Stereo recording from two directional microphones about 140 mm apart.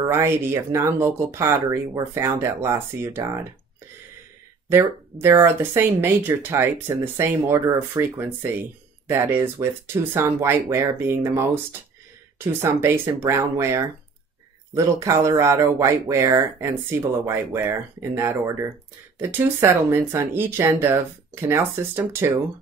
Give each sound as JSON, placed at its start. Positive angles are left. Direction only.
{"t": 0.1, "sound": "speech", "side_deg": -20}
{"t": 4.6, "sound": "speech", "side_deg": -20}
{"t": 12.6, "sound": "speech", "side_deg": -15}